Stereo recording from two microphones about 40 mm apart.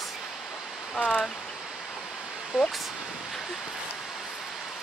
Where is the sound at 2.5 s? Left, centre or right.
Right.